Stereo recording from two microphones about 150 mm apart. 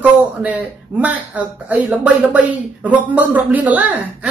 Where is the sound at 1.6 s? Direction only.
10° right (ahead or behind).